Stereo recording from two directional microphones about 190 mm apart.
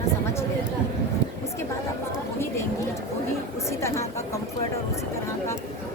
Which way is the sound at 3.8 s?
15° left (ahead or behind).